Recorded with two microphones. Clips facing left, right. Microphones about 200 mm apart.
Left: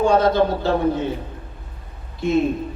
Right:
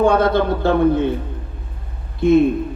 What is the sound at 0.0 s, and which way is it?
Speech, 55° right (ahead or behind).